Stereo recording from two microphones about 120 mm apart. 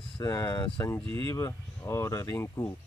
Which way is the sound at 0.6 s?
45° left (ahead or behind).